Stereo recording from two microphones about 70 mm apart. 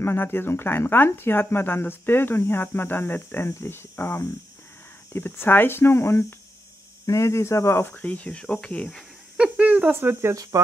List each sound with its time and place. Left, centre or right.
0.0 s speech: left
7.9 s speech: left
9.4 s speech: right
10.3 s speech: right